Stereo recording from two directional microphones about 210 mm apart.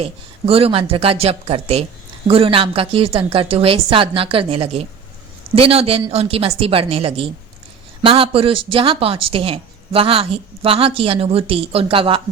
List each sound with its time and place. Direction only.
0.0 s speech: 25° right (ahead or behind)